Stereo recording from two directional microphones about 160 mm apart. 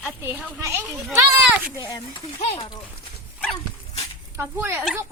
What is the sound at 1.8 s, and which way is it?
Speech, 25° left (ahead or behind).